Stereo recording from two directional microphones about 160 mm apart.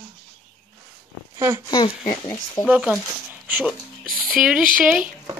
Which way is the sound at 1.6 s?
30° left (ahead or behind).